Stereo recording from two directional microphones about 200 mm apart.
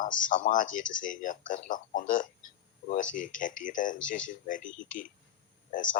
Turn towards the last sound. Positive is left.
turn(degrees=40)  # may be behind; listen again after turning